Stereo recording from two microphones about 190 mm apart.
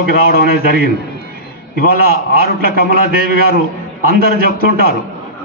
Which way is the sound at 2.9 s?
50° right (ahead or behind).